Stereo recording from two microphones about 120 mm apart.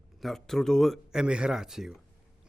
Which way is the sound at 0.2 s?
Centre (ahead or behind).